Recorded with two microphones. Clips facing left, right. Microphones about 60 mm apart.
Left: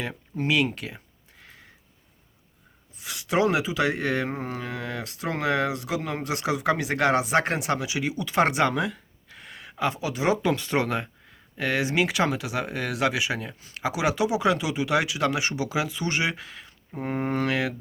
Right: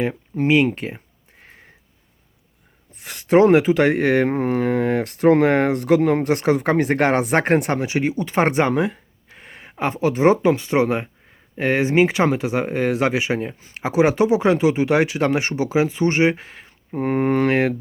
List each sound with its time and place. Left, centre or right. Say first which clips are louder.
0.3 s a sound: right 7 dB; right
2.9 s speech: right 10 dB; right
10.5 s speech: right 6 dB; right
17.0 s speech: right 8 dB; right